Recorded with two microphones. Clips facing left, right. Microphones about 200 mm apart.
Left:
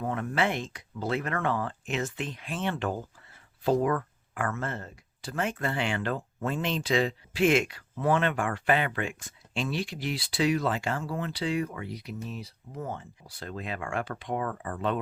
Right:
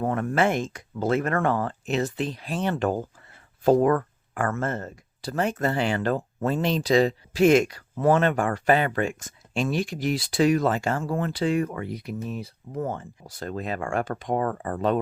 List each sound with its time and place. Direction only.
0.0 s speech: 50° right (ahead or behind)